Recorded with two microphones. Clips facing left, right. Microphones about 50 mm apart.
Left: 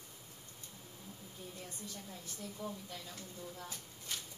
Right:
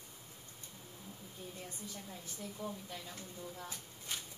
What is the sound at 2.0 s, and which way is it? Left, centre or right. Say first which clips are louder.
Speech: right 1 dB; centre.